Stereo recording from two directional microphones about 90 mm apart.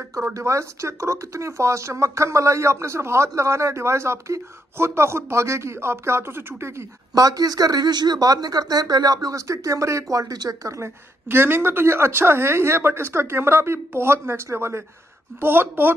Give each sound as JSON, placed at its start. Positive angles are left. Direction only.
{"t": 0.3, "sound": "speech", "side_deg": -35}
{"t": 7.2, "sound": "speech", "side_deg": -45}